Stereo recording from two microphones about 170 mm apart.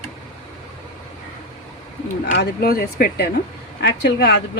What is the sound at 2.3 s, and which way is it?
Speech, 70° left (ahead or behind).